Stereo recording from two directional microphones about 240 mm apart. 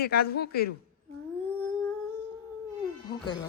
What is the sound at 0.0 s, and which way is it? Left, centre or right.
Speech, left.